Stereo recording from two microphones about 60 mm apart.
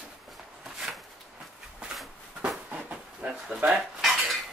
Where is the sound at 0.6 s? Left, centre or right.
Centre.